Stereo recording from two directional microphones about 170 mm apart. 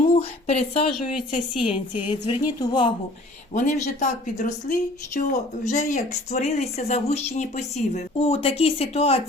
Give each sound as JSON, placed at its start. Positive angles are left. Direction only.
{"t": 0.1, "sound": "a woman's voice", "side_deg": 35}
{"t": 3.5, "sound": "a woman's voice", "side_deg": 50}